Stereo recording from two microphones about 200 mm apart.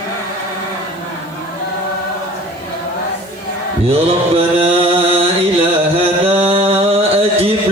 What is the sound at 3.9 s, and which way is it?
Mantra, 30° right (ahead or behind).